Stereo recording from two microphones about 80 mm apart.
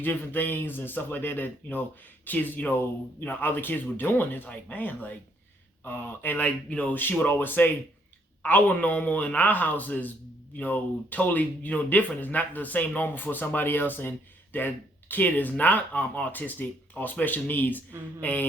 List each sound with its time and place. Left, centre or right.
0.0 s speech: left